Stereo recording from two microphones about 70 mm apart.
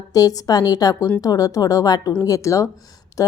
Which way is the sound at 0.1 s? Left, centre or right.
Left.